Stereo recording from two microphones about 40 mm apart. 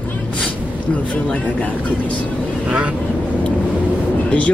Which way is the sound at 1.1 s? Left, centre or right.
Left.